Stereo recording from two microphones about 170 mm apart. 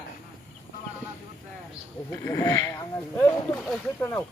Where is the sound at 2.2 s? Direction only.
20° left (ahead or behind).